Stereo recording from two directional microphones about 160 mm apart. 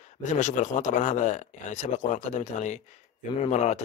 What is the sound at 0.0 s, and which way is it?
A man's voice, 50° left (ahead or behind).